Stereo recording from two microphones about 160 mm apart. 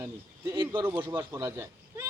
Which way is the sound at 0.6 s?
30° right (ahead or behind).